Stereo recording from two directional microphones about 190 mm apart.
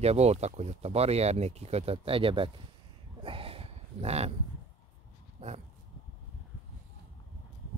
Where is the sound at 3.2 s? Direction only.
30° right (ahead or behind).